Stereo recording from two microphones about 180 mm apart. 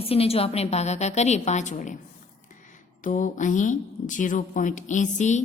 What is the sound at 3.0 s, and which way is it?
A woman's voice, 45° left (ahead or behind).